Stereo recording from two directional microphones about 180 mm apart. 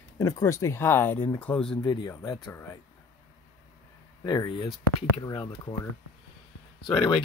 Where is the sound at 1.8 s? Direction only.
20° left (ahead or behind).